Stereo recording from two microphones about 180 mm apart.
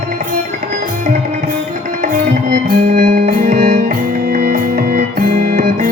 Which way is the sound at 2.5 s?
40° right (ahead or behind).